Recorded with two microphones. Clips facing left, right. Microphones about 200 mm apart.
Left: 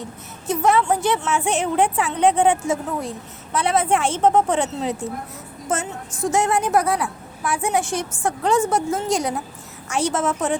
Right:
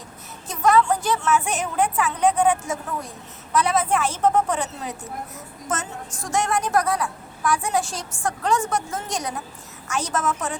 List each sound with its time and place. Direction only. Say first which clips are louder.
0.4 s a woman's voice: left 1 dB; 25° left (ahead or behind)
6.1 s a woman's voice: left 11 dB; 5° left (ahead or behind)
6.3 s a woman's voice: left 2 dB; 25° left (ahead or behind)